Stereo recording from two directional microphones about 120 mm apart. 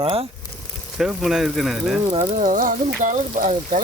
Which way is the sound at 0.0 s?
50° right (ahead or behind).